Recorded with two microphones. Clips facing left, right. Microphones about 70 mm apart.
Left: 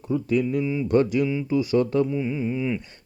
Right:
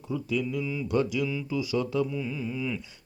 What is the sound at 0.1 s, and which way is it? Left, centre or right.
Music, left.